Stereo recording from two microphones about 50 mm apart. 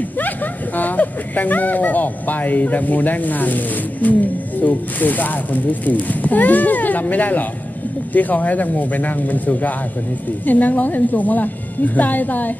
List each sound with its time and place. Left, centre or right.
0.7 s speech: left